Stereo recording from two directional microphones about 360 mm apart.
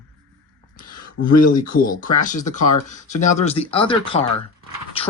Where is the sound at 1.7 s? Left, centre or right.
Left.